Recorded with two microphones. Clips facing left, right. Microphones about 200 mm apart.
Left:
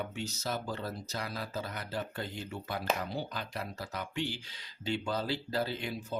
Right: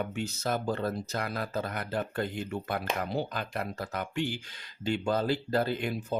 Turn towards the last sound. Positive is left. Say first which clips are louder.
# right 5 dB
turn(degrees=-55)  # may be behind; listen again after turning